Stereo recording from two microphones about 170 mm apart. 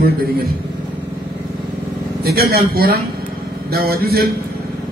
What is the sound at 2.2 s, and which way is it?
A man's voice, 65° right (ahead or behind).